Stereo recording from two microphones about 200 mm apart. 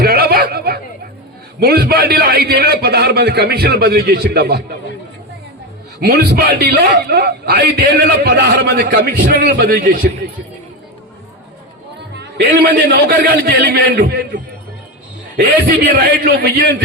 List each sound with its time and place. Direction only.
0.0 s a sound: 50° right (ahead or behind)
1.5 s a man's voice: 50° right (ahead or behind)
6.0 s a man's voice: 50° right (ahead or behind)
12.1 s a man's voice: 55° right (ahead or behind)